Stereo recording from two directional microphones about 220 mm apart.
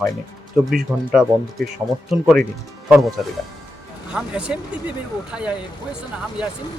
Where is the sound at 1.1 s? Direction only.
Centre (ahead or behind).